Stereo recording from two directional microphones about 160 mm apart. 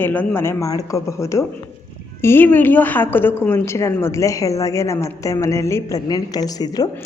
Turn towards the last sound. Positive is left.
turn(degrees=25)  # may be behind; listen again after turning